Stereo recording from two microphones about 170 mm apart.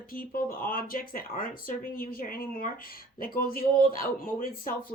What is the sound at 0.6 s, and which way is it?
Speech, 55° left (ahead or behind).